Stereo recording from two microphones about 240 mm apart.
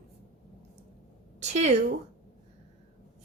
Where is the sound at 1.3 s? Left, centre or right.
Right.